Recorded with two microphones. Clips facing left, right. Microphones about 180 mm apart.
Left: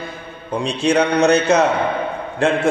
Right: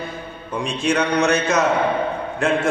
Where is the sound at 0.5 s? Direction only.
35° left (ahead or behind).